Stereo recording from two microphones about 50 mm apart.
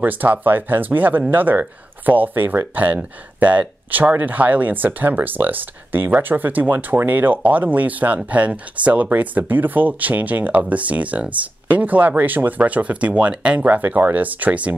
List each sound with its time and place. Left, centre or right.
0.0 s speech: right
13.7 s speech: right